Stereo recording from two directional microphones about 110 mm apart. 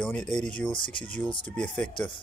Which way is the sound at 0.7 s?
45° left (ahead or behind).